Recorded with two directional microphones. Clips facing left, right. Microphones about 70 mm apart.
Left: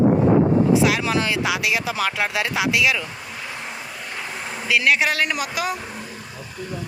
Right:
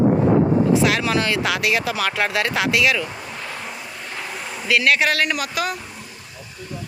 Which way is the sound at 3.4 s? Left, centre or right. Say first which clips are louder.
Even; centre.